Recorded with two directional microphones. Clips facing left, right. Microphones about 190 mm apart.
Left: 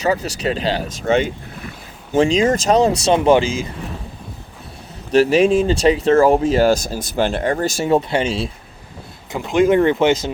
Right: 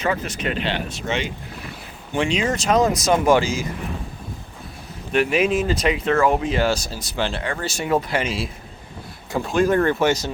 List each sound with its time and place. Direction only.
0.0 s speech: 35° left (ahead or behind)
5.1 s speech: 35° left (ahead or behind)
7.9 s speech: 25° left (ahead or behind)